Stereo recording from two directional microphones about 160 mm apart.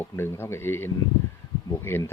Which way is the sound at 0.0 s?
15° left (ahead or behind).